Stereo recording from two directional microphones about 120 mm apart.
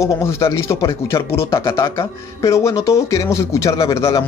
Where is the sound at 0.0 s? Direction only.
25° left (ahead or behind).